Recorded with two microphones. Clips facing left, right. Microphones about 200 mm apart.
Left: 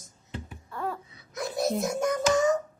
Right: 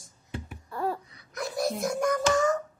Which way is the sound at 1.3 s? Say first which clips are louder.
Left 2 dB; 20° left (ahead or behind).